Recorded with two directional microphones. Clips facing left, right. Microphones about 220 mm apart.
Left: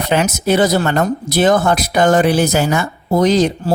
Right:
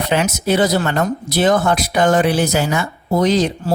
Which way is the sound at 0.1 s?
45° left (ahead or behind).